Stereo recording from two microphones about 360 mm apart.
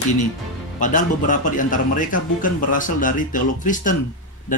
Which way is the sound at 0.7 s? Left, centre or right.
Left.